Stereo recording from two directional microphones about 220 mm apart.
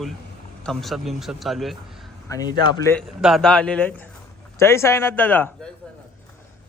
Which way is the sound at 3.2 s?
Centre (ahead or behind).